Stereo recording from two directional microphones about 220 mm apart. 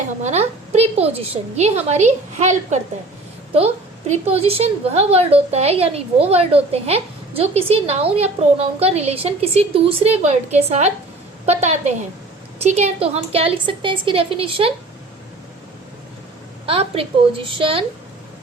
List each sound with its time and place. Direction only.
0.2 s a woman's voice: 30° right (ahead or behind)
16.6 s a woman's voice: 25° right (ahead or behind)